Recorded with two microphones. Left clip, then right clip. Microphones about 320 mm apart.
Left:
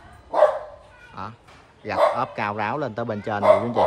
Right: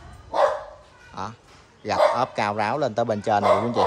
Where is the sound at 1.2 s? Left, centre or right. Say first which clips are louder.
Right 2 dB; centre.